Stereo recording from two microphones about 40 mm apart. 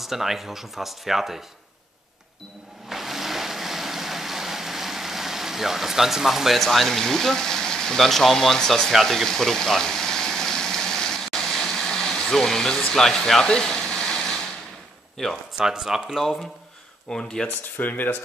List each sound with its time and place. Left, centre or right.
0.0 s speech: centre
2.9 s vehicle: centre
6.6 s speech: centre
9.0 s a sound: centre
15.2 s speech: centre
15.5 s speech: centre
17.1 s speech: centre
17.7 s speech: left